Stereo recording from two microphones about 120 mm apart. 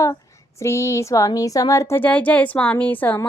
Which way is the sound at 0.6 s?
25° left (ahead or behind).